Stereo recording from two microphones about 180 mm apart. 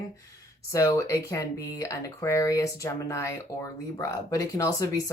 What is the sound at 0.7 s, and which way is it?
Speech, 20° left (ahead or behind).